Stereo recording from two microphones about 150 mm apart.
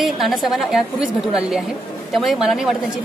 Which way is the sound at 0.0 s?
Centre (ahead or behind).